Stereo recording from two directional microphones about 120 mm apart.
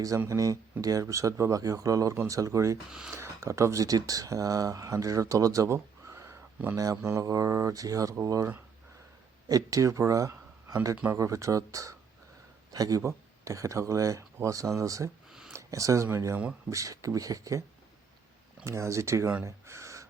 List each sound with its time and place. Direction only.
0.2 s speech: 25° right (ahead or behind)
2.9 s speech: 5° right (ahead or behind)
3.2 s speech: 25° right (ahead or behind)
10.9 s speech: 15° right (ahead or behind)
11.2 s speech: 25° right (ahead or behind)
15.3 s a sound: 5° right (ahead or behind)
15.5 s speech: 25° right (ahead or behind)
18.6 s speech: 25° right (ahead or behind)
19.5 s gasp: 25° right (ahead or behind)